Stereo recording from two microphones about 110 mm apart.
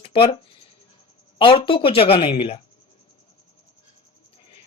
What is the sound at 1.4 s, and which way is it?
Speech, 55° left (ahead or behind).